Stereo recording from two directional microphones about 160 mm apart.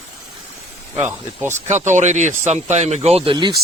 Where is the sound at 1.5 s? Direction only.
45° right (ahead or behind).